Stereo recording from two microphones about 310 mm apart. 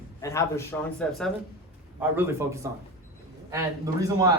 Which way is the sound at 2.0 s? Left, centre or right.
Centre.